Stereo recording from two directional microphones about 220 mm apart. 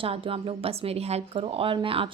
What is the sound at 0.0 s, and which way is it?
A woman's voice, 25° right (ahead or behind).